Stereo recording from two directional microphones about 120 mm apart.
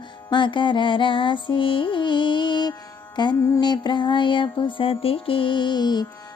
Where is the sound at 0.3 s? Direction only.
40° left (ahead or behind).